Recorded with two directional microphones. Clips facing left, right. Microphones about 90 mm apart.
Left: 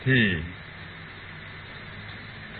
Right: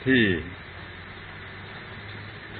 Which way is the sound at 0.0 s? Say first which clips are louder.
Right 3 dB; centre (ahead or behind).